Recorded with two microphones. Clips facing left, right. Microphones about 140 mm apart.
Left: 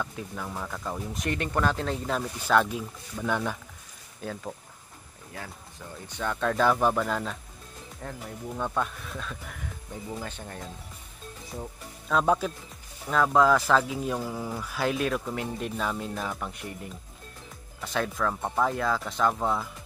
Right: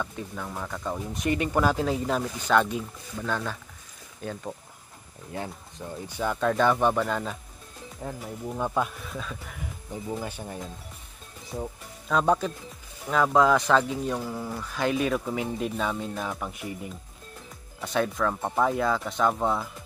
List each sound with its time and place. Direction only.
0.0 s speech: centre (ahead or behind)
3.3 s speech: 15° left (ahead or behind)
4.2 s speech: centre (ahead or behind)
6.0 s speech: 5° right (ahead or behind)
8.0 s speech: 10° right (ahead or behind)